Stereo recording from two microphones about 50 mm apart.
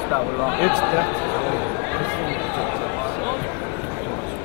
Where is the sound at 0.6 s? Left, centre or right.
Right.